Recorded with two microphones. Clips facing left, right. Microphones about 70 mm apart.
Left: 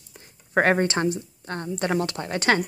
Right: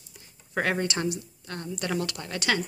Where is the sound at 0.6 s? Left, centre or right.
Left.